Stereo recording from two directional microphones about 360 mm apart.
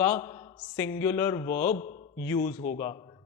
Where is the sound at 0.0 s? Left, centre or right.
Centre.